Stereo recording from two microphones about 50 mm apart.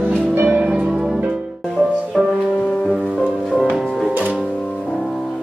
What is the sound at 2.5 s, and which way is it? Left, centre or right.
Music, centre.